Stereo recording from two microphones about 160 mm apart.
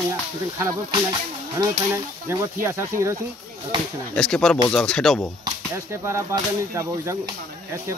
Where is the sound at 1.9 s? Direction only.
15° right (ahead or behind).